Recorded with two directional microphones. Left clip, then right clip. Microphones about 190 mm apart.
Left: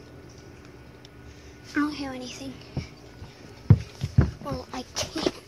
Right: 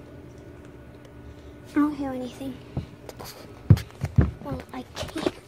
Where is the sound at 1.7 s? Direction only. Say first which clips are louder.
Right 3 dB; 25° right (ahead or behind).